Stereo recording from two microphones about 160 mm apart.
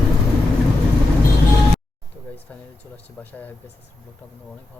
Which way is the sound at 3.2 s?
10° left (ahead or behind).